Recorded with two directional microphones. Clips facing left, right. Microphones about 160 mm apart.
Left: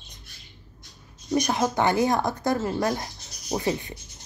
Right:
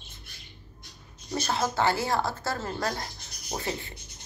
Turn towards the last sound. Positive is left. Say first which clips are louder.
# left 7 dB
turn(degrees=20)  # may be behind; listen again after turning